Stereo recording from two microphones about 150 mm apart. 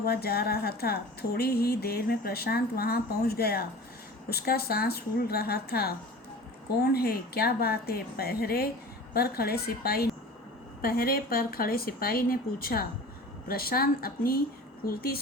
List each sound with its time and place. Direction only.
0.0 s speech: 90° left
6.9 s speech: 90° left
10.8 s a woman's voice: 80° left